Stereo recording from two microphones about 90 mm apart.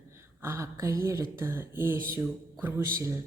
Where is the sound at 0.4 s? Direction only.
30° right (ahead or behind).